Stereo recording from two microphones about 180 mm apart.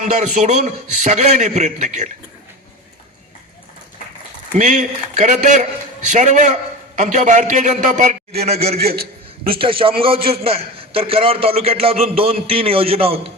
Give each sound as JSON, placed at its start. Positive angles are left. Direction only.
{"t": 0.0, "sound": "a man's voice", "side_deg": -40}
{"t": 4.5, "sound": "a man's voice", "side_deg": -45}
{"t": 8.8, "sound": "a man's voice", "side_deg": -60}
{"t": 9.5, "sound": "a man's voice", "side_deg": -30}